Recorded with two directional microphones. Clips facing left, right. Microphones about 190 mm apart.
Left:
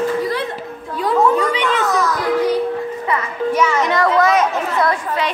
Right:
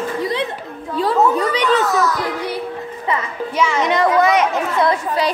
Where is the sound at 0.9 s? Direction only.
30° right (ahead or behind).